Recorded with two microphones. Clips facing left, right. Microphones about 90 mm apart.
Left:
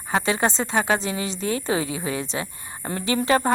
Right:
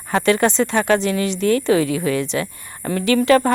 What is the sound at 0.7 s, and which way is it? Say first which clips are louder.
Speech: right 5 dB; 15° left (ahead or behind).